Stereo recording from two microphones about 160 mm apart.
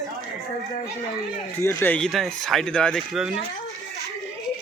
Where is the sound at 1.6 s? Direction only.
15° left (ahead or behind).